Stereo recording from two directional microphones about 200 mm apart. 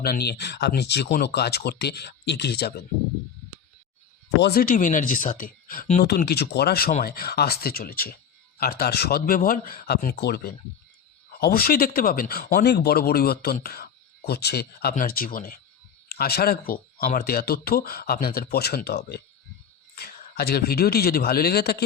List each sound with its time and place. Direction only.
0.0 s speech: 50° left (ahead or behind)
4.4 s speech: 55° left (ahead or behind)